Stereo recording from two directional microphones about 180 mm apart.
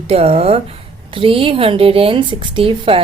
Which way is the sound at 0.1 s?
35° right (ahead or behind).